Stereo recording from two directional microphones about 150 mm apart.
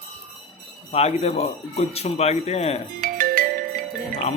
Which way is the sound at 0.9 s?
45° left (ahead or behind).